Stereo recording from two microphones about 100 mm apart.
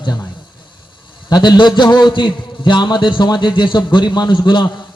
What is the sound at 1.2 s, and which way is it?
A man's voice, 45° left (ahead or behind).